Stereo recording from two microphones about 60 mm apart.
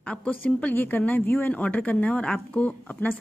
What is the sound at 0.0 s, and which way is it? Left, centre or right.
Speech, left.